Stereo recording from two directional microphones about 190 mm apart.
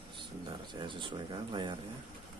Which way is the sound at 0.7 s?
25° right (ahead or behind).